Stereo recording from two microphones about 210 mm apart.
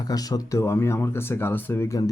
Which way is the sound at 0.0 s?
20° left (ahead or behind).